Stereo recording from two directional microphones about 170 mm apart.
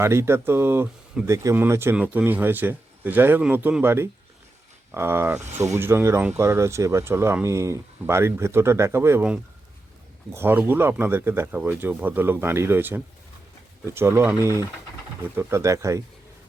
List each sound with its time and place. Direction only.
0.0 s speech: 15° right (ahead or behind)